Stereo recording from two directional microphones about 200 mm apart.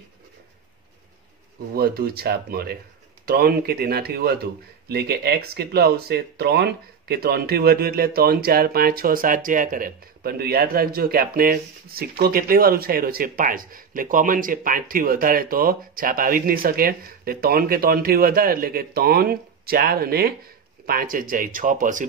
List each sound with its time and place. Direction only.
1.8 s speech: 50° right (ahead or behind)